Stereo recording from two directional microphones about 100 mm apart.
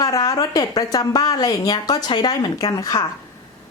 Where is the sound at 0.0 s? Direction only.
35° left (ahead or behind).